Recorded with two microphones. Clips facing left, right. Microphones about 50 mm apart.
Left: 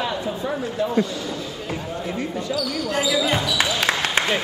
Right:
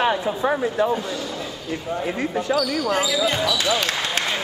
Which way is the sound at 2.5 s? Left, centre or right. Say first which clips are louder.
Right 2 dB; centre.